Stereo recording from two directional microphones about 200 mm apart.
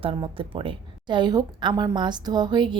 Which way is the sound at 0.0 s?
25° right (ahead or behind).